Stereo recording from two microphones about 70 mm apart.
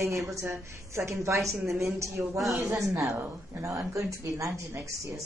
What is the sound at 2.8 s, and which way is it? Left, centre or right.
Speech, right.